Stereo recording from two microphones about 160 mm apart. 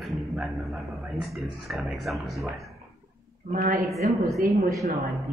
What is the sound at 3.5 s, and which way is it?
Speech, 60° right (ahead or behind).